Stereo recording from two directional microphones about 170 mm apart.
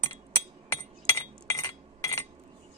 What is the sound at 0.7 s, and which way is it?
Chink, 15° left (ahead or behind).